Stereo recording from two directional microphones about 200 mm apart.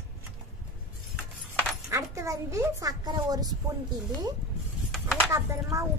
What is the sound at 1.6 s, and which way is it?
Speech, 15° right (ahead or behind).